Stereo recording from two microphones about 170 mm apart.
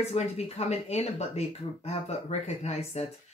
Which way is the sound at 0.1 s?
40° left (ahead or behind).